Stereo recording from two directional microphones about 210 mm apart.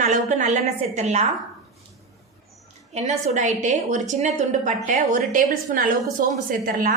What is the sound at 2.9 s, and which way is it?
A woman's voice, 35° right (ahead or behind).